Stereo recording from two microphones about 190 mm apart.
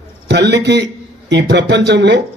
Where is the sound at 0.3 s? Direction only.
65° right (ahead or behind).